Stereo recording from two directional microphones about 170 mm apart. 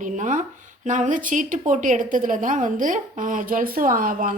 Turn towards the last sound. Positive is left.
turn(degrees=-55)  # may be behind; listen again after turning